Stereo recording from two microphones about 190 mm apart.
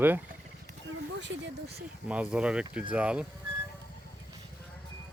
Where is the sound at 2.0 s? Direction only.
5° right (ahead or behind).